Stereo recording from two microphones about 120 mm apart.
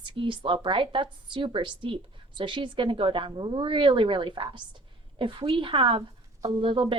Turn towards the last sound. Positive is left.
turn(degrees=-45)  # may be behind; listen again after turning